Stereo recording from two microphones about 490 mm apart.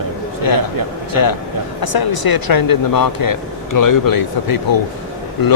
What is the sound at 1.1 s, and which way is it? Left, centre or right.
Speech, left.